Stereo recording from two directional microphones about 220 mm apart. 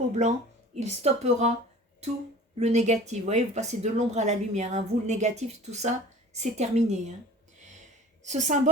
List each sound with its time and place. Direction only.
0.2 s speech: 30° right (ahead or behind)
2.6 s speech: 30° right (ahead or behind)
8.2 s speech: 30° right (ahead or behind)